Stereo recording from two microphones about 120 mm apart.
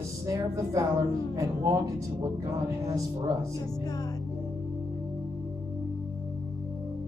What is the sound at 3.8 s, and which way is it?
Music, 30° left (ahead or behind).